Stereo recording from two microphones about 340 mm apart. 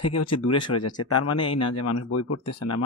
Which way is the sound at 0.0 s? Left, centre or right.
Left.